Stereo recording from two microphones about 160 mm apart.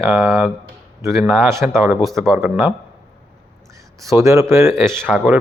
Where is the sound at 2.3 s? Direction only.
15° right (ahead or behind).